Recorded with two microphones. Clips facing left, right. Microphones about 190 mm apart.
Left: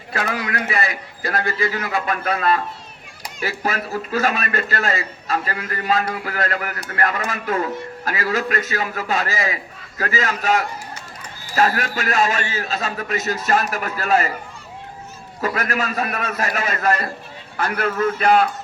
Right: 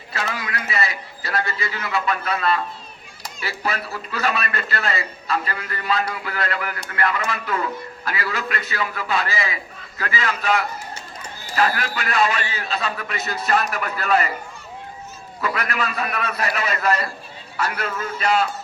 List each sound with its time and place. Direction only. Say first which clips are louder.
0.3 s a man's voice: left 4 dB; 40° left (ahead or behind)
0.7 s a man's voice: left 2 dB; 50° left (ahead or behind)
15.4 s a man's voice: left 2 dB; 45° left (ahead or behind)